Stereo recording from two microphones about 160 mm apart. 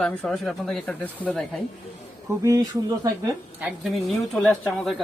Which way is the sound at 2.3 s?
20° right (ahead or behind).